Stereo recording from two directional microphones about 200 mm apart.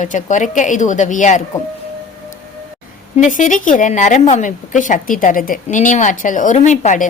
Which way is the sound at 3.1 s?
40° left (ahead or behind).